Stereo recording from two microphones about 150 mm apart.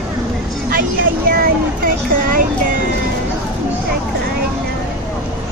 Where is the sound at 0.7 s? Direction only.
75° right (ahead or behind).